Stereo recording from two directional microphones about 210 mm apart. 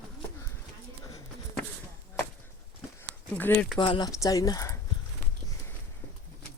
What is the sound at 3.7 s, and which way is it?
Speech, 20° left (ahead or behind).